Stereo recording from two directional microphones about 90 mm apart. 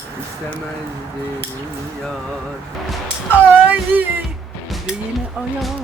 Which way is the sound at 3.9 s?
20° right (ahead or behind).